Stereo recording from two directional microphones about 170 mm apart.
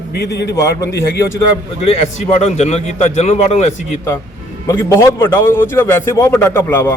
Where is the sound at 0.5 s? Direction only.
20° left (ahead or behind).